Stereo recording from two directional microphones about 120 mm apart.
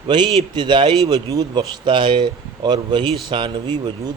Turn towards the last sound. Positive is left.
turn(degrees=-35)  # may be behind; listen again after turning